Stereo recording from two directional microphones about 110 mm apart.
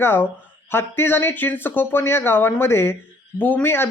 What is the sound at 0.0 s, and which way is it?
A man's voice, 20° left (ahead or behind).